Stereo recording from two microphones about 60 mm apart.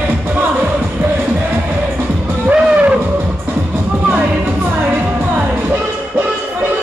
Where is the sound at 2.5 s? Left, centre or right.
Centre.